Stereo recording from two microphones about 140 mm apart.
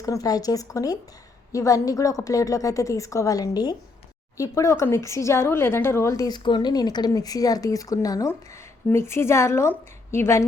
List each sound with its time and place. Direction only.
0.0 s speech: 25° left (ahead or behind)